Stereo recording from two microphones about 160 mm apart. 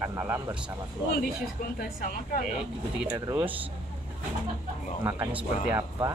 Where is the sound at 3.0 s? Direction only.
10° right (ahead or behind).